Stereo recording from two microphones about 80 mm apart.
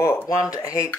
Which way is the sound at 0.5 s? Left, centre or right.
Left.